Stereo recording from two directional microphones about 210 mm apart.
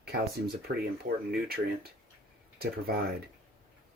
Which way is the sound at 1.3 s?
45° right (ahead or behind).